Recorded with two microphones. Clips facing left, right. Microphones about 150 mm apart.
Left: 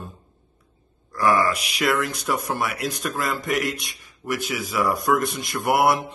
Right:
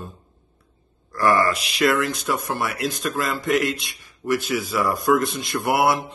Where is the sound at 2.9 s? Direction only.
10° left (ahead or behind).